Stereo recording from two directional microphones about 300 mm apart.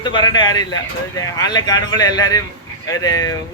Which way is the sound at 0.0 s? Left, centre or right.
Centre.